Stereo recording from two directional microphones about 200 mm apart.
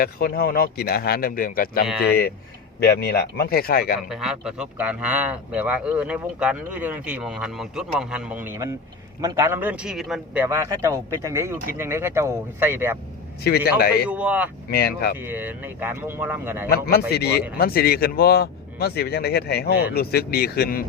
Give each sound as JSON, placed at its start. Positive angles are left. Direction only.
{"t": 0.0, "sound": "a man's voice", "side_deg": 50}
{"t": 4.1, "sound": "speech", "side_deg": -5}
{"t": 13.7, "sound": "a man's voice", "side_deg": 50}
{"t": 14.1, "sound": "speech", "side_deg": -5}
{"t": 14.7, "sound": "a man's voice", "side_deg": 50}
{"t": 15.2, "sound": "speech", "side_deg": -10}
{"t": 16.6, "sound": "a man's voice", "side_deg": 50}